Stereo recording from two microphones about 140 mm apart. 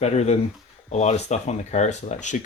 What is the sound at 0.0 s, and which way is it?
Speech, 50° left (ahead or behind).